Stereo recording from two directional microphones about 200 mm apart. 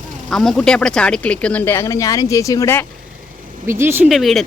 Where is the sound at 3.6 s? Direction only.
10° right (ahead or behind).